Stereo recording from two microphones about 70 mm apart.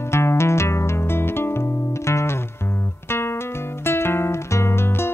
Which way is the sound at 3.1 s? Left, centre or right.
Left.